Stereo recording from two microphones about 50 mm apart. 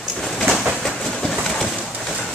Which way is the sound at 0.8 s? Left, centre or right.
Centre.